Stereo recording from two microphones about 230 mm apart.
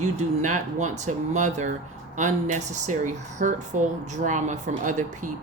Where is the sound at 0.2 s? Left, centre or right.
Right.